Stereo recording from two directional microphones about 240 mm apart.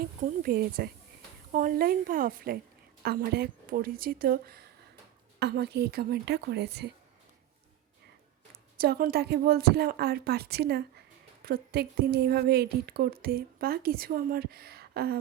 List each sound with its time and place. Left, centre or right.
0.3 s speech: right
8.8 s speech: right